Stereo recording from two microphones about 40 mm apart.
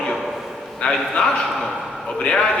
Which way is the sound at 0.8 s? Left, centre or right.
Left.